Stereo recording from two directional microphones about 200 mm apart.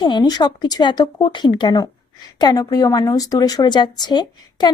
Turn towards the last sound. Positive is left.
turn(degrees=20)  # may be behind; listen again after turning